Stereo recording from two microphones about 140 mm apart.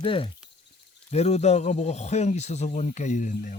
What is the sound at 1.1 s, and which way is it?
A man's voice, 50° left (ahead or behind).